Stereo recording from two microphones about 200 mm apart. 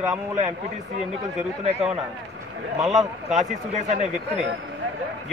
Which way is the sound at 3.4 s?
35° right (ahead or behind).